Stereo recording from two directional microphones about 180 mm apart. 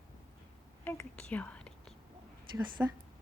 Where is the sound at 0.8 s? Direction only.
10° left (ahead or behind).